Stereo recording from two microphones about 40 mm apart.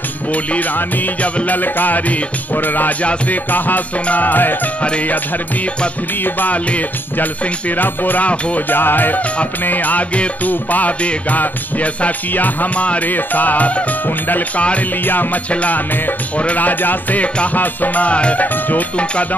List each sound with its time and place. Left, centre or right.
0.3 s music: left
3.0 s music: left
3.5 s music: left
6.2 s music: left
7.7 s music: left
8.3 s music: left
8.6 s music: left
12.8 s music: left
13.1 s music: left
15.5 s music: left